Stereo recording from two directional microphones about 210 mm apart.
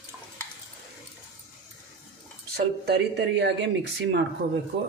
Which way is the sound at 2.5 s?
50° right (ahead or behind).